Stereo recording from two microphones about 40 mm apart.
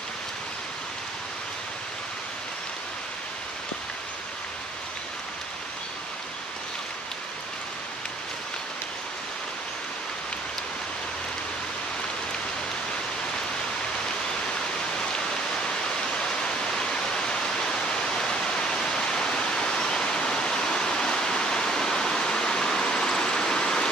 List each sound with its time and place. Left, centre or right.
16.4 s waterfall: centre
18.1 s pink noise: centre